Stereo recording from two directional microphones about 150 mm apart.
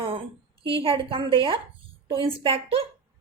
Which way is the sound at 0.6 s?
35° right (ahead or behind).